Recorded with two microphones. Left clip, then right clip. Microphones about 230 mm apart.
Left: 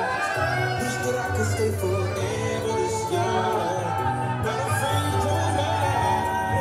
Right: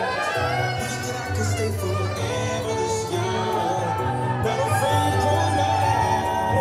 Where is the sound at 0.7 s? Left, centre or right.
Centre.